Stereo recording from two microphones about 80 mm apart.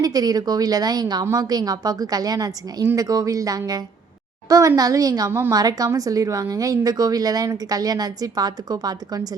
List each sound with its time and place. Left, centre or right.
0.0 s a woman's voice: right
1.2 s a woman's voice: right